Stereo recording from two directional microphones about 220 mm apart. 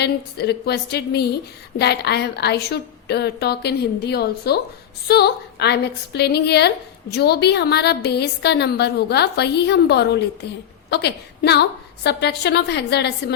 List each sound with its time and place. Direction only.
0.0 s a woman's voice: 50° left (ahead or behind)